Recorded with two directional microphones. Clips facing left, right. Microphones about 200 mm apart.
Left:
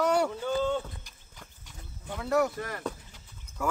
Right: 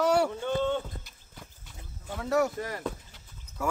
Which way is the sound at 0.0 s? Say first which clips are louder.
Right 1 dB; 5° right (ahead or behind).